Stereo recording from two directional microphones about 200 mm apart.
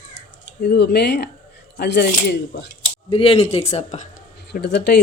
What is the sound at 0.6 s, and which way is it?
Speech, 55° left (ahead or behind).